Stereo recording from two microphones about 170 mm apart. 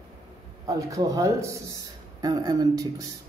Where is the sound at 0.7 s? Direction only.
20° right (ahead or behind).